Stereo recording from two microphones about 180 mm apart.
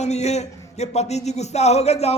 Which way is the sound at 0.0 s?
40° left (ahead or behind).